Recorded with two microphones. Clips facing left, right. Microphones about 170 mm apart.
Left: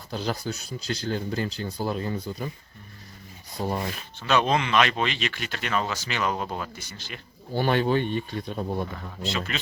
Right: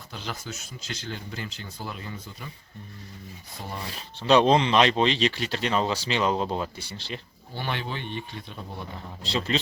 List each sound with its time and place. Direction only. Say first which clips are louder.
0.1 s speech: left 7 dB; 35° left (ahead or behind)
3.6 s speech: left 9 dB; 40° left (ahead or behind)
3.9 s speech: right 8 dB; 30° right (ahead or behind)
7.5 s speech: left 10 dB; 45° left (ahead or behind)
9.5 s speech: right 6 dB; 30° right (ahead or behind)